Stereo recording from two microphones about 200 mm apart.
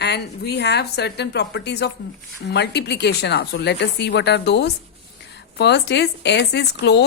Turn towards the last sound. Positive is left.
turn(degrees=60)  # may be behind; listen again after turning